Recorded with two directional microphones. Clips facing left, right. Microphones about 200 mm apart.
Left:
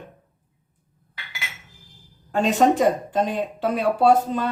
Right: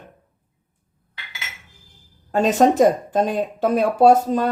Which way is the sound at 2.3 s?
40° right (ahead or behind).